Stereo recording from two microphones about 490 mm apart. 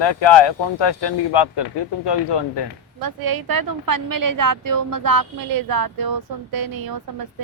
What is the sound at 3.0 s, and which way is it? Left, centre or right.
A woman's voice, right.